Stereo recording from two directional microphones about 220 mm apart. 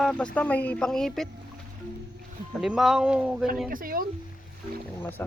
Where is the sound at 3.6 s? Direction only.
40° right (ahead or behind).